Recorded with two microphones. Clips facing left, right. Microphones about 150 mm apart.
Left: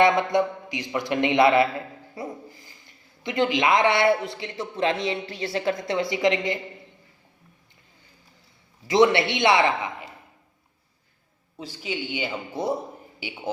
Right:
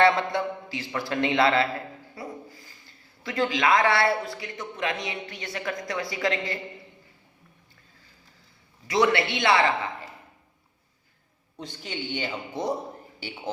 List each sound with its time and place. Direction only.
0.0 s a man's voice: 15° left (ahead or behind)
8.9 s a man's voice: 25° left (ahead or behind)
11.5 s a man's voice: 5° left (ahead or behind)